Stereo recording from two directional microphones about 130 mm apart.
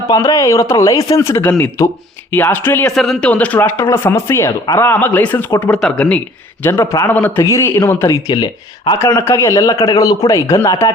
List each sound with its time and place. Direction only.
0.1 s a man's voice: 25° left (ahead or behind)
2.9 s speech: centre (ahead or behind); by 7.1 s 25° left (ahead or behind)
7.1 s speech: 15° left (ahead or behind)
8.3 s speech: 35° left (ahead or behind)
9.0 s a man's voice: 20° left (ahead or behind)